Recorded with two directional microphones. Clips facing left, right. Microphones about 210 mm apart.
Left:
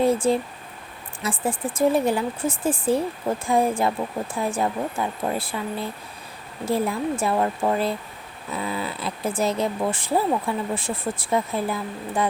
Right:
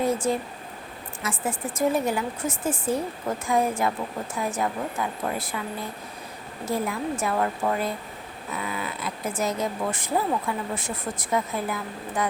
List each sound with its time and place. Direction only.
0.0 s a sound: 30° left (ahead or behind)
1.2 s speech: 30° left (ahead or behind)
6.7 s speech: 30° left (ahead or behind)